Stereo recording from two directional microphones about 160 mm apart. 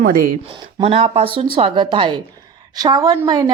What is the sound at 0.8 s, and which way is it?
A woman's voice, 35° right (ahead or behind).